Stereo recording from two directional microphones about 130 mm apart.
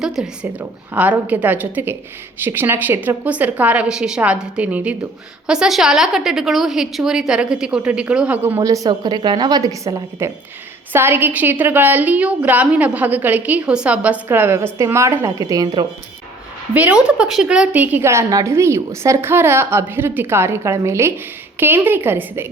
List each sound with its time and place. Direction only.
0.2 s a woman's voice: 5° right (ahead or behind); by 15.9 s 35° right (ahead or behind)
16.7 s a woman's voice: 10° right (ahead or behind)